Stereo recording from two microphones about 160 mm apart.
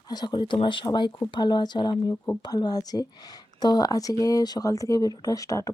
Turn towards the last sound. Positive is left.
turn(degrees=20)  # may be behind; listen again after turning